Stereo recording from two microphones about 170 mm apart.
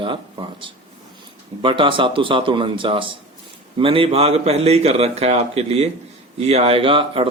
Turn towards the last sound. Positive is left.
turn(degrees=-30)  # may be behind; listen again after turning